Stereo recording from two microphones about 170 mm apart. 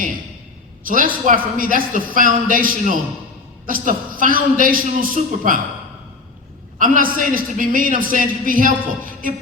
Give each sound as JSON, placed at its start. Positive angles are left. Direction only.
{"t": 0.9, "sound": "a man's voice", "side_deg": -55}
{"t": 6.7, "sound": "a man's voice", "side_deg": -55}